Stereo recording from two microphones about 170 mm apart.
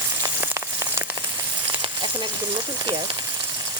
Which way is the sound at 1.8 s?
30° right (ahead or behind).